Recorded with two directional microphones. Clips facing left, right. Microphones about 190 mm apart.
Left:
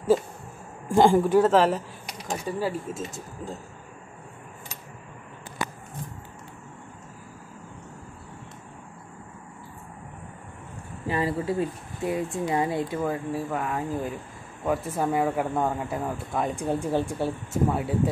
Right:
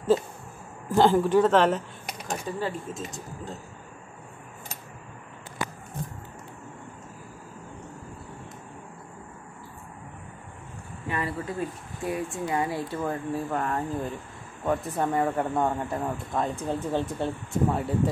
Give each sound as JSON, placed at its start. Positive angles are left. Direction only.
{"t": 0.8, "sound": "speech", "side_deg": 15}
{"t": 11.1, "sound": "speech", "side_deg": 25}
{"t": 13.0, "sound": "speech", "side_deg": 5}